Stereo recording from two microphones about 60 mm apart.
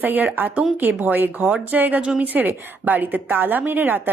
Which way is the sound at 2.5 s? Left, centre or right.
Right.